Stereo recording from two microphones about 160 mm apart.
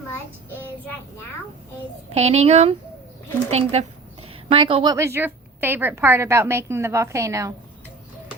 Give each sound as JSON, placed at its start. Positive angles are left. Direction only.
{"t": 2.0, "sound": "a woman's voice", "side_deg": -40}